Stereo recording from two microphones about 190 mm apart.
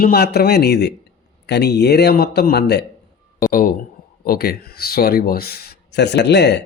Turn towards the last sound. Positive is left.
turn(degrees=65)  # may be behind; listen again after turning